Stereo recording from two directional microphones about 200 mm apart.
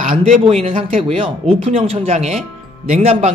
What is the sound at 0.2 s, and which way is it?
Speech, 30° right (ahead or behind).